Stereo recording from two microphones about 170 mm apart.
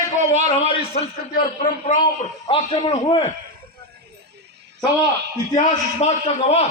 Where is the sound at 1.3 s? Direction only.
50° left (ahead or behind).